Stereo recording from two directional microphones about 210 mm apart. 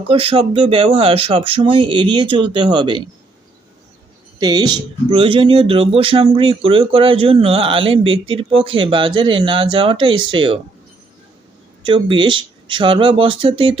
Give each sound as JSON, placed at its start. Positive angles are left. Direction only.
{"t": 0.1, "sound": "speech", "side_deg": -25}
{"t": 4.4, "sound": "speech", "side_deg": -20}
{"t": 11.8, "sound": "speech", "side_deg": -25}